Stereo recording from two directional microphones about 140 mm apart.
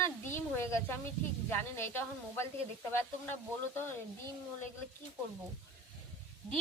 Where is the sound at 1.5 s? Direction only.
15° left (ahead or behind).